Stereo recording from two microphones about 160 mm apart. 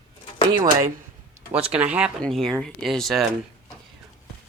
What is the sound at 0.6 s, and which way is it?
Speech, 20° right (ahead or behind).